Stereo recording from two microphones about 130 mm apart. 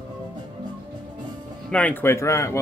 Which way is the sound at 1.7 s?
10° left (ahead or behind).